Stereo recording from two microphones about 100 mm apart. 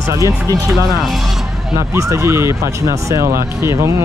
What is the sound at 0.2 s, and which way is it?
Speech, 35° right (ahead or behind).